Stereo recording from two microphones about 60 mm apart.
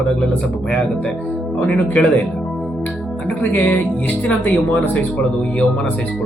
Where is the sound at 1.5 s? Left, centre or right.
Left.